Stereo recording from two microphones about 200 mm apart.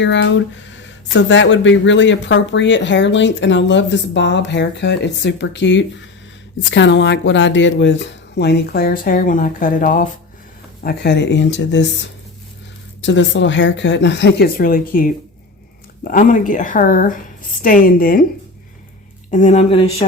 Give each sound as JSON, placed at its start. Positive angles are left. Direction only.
{"t": 0.0, "sound": "speech", "side_deg": 65}
{"t": 10.8, "sound": "speech", "side_deg": 55}
{"t": 19.3, "sound": "speech", "side_deg": 35}